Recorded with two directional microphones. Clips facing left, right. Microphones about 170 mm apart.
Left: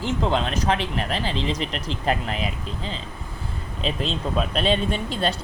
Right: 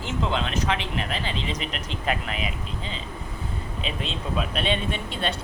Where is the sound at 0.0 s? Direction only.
40° left (ahead or behind).